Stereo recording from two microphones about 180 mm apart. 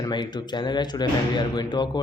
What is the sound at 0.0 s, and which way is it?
Speech, 25° left (ahead or behind).